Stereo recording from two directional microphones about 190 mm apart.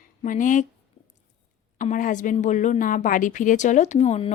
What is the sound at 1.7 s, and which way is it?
A woman's voice, 45° left (ahead or behind).